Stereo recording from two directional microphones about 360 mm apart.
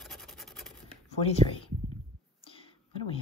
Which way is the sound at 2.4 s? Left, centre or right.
Centre.